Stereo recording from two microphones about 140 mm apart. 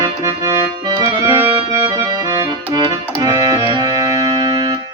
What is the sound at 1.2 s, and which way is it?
Accordion, 25° right (ahead or behind).